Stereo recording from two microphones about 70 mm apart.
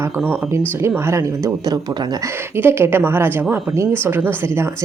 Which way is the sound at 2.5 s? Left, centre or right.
Right.